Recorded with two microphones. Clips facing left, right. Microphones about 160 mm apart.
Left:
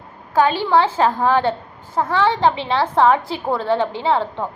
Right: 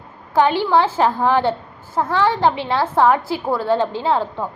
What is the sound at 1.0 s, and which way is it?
Speech, 15° right (ahead or behind).